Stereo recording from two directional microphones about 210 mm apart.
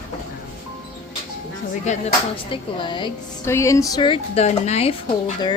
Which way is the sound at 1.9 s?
30° left (ahead or behind).